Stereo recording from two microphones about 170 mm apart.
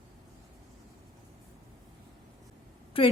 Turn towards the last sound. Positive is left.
turn(degrees=35)  # may be behind; listen again after turning